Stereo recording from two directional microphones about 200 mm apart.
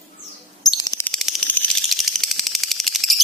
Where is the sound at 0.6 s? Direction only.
20° left (ahead or behind).